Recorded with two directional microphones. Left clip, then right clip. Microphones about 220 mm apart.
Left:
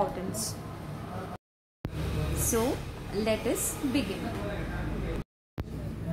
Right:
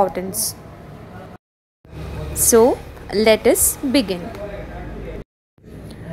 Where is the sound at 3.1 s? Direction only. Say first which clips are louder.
Right 15 dB; 35° right (ahead or behind).